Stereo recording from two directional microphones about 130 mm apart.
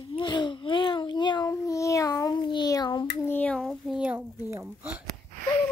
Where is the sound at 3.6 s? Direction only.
Centre (ahead or behind).